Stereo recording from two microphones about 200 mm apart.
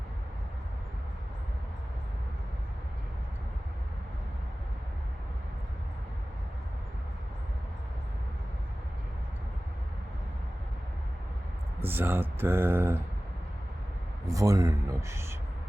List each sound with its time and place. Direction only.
11.8 s speech: 10° right (ahead or behind)
14.3 s speech: 15° right (ahead or behind)